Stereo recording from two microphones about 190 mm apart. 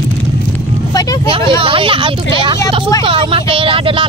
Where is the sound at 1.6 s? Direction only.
30° right (ahead or behind).